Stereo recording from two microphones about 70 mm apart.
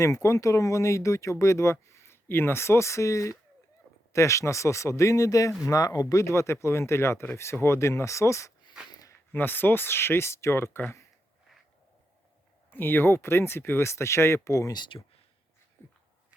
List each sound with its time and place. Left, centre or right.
0.0 s speech: left
5.6 s speech: left
9.3 s speech: left
12.7 s speech: left